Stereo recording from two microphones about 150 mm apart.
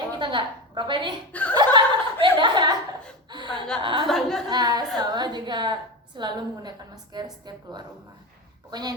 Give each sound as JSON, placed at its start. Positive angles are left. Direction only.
{"t": 0.2, "sound": "a woman's voice", "side_deg": -35}
{"t": 1.3, "sound": "speech", "side_deg": 10}
{"t": 1.5, "sound": "chuckle", "side_deg": -30}
{"t": 3.8, "sound": "speech", "side_deg": -35}
{"t": 4.0, "sound": "a woman's voice", "side_deg": 0}
{"t": 4.4, "sound": "a woman's voice", "side_deg": -25}